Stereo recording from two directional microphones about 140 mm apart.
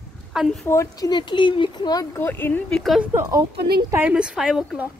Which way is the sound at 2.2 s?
15° left (ahead or behind).